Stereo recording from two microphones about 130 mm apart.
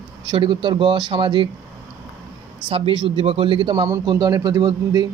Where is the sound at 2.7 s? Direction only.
45° right (ahead or behind).